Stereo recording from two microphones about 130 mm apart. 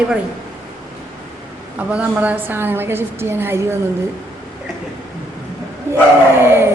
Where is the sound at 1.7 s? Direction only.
10° right (ahead or behind).